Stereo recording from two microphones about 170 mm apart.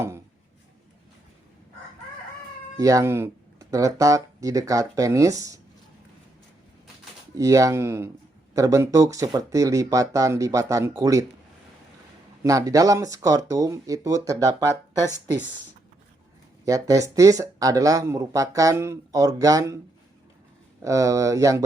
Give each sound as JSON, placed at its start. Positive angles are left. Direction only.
{"t": 2.7, "sound": "speech", "side_deg": -20}
{"t": 7.3, "sound": "speech", "side_deg": -20}
{"t": 12.4, "sound": "speech", "side_deg": -20}
{"t": 16.6, "sound": "speech", "side_deg": -20}
{"t": 20.8, "sound": "speech", "side_deg": -20}